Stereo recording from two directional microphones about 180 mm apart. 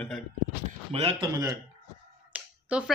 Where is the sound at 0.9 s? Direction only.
30° right (ahead or behind).